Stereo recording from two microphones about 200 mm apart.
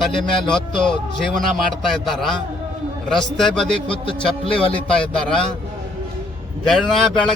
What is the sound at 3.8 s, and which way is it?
Speech, 25° left (ahead or behind).